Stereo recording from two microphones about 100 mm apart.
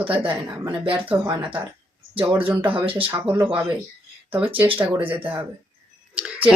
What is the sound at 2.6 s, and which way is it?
Speech, 65° right (ahead or behind).